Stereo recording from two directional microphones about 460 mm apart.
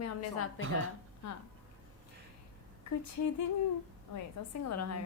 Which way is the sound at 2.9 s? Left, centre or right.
Left.